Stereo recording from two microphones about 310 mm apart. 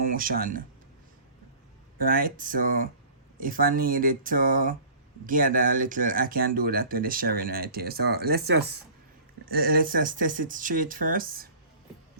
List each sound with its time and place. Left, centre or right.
0.0 s speech: right
2.0 s speech: right